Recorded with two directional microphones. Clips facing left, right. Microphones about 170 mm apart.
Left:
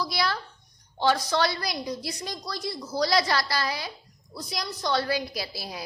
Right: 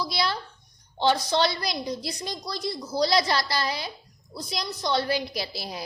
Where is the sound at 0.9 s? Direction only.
25° right (ahead or behind).